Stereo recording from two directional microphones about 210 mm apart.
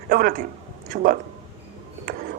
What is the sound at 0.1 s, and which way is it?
Speech, 45° right (ahead or behind).